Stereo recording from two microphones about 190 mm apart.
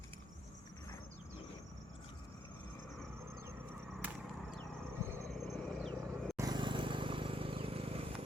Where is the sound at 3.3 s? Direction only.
15° right (ahead or behind).